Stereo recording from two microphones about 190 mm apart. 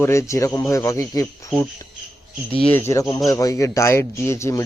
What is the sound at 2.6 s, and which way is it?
A man's voice, 5° left (ahead or behind).